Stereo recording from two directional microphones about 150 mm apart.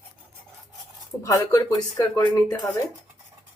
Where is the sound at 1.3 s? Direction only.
25° left (ahead or behind).